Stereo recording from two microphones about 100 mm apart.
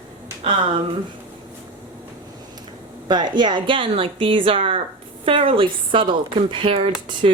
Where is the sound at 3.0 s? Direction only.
50° right (ahead or behind); by 6.9 s 75° right (ahead or behind).